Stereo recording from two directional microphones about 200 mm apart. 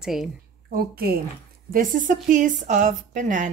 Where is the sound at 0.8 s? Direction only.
50° right (ahead or behind).